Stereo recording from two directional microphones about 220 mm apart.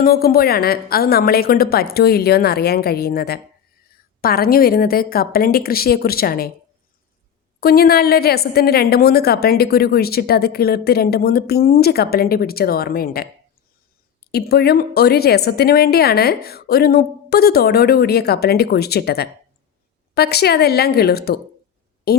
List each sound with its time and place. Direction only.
0.0 s a woman's voice: 45° left (ahead or behind)
7.6 s a woman's voice: 45° left (ahead or behind)
14.3 s a woman's voice: 45° left (ahead or behind)